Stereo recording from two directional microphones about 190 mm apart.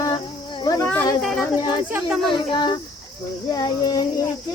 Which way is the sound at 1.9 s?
5° right (ahead or behind).